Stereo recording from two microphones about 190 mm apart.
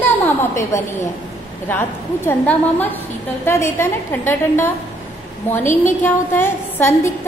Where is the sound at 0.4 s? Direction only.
15° left (ahead or behind).